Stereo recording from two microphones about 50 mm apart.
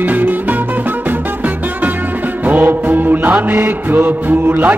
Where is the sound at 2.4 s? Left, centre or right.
Right.